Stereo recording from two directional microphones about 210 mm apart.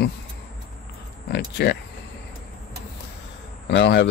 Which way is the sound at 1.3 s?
50° left (ahead or behind).